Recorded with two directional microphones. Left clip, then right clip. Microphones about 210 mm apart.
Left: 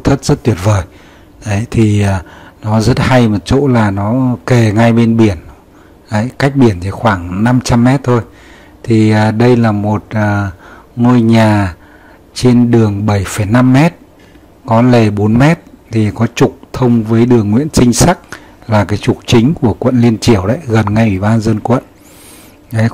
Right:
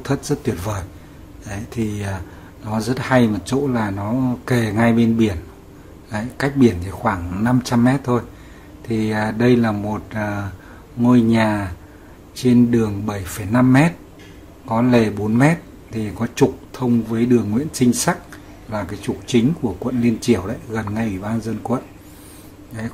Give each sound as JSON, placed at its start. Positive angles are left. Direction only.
{"t": 0.0, "sound": "a man's voice", "side_deg": 35}